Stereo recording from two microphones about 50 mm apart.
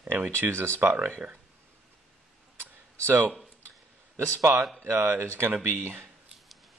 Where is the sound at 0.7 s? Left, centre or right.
Right.